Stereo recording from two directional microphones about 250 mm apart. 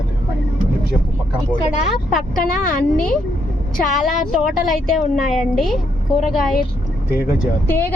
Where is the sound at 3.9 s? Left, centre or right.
Centre.